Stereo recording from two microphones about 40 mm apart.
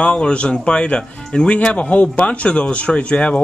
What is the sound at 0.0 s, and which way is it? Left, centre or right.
Speech, left.